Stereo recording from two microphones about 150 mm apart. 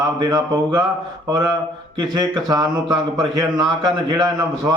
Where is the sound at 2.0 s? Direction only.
25° right (ahead or behind).